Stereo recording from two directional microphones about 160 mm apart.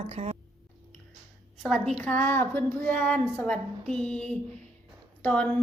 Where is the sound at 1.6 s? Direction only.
5° left (ahead or behind).